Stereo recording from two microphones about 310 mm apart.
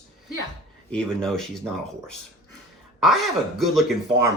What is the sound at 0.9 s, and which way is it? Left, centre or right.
Speech, centre.